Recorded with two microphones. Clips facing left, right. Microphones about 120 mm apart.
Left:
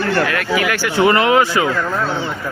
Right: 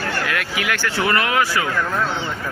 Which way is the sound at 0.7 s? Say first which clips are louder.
Left 5 dB; 15° left (ahead or behind).